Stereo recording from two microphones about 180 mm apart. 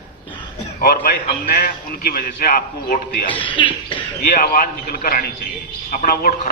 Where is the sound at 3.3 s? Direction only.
25° left (ahead or behind).